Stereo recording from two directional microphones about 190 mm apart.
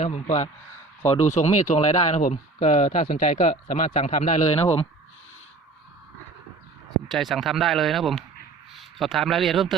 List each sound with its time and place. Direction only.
0.0 s speech: 35° left (ahead or behind)
7.1 s speech: centre (ahead or behind)